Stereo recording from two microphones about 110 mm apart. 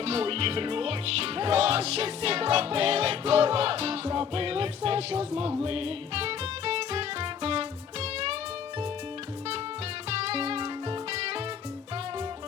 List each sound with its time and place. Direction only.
0.0 s music: 65° right (ahead or behind)
10.1 s music: 70° right (ahead or behind)